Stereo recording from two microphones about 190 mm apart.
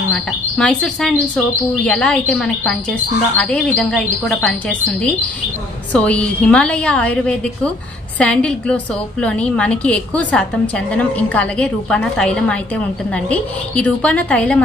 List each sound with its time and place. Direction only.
0.1 s a woman's voice: 5° left (ahead or behind)